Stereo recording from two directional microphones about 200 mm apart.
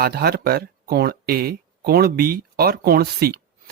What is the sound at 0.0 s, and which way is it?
Speech, 50° right (ahead or behind).